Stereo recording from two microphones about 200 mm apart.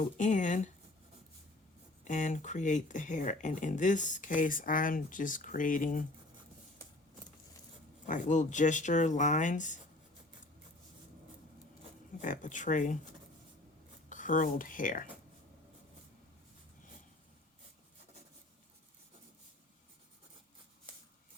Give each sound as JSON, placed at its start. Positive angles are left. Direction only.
{"t": 0.2, "sound": "speech", "side_deg": 40}
{"t": 2.0, "sound": "speech", "side_deg": 40}
{"t": 8.0, "sound": "speech", "side_deg": 40}
{"t": 12.2, "sound": "speech", "side_deg": 40}
{"t": 14.1, "sound": "speech", "side_deg": 40}